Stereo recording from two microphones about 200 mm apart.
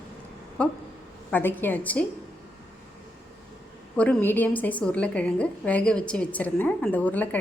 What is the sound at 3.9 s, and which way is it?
A woman's voice, 5° left (ahead or behind).